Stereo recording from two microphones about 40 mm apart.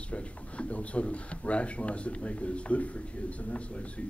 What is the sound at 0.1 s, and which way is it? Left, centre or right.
Speech, left.